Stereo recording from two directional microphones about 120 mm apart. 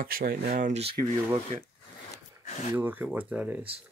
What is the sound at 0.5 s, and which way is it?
Speech, 90° right.